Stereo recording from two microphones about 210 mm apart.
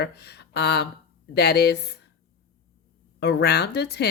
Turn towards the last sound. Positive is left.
turn(degrees=50)  # may be behind; listen again after turning